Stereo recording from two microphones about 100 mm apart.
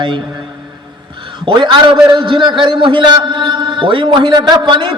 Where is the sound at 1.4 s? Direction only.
55° right (ahead or behind).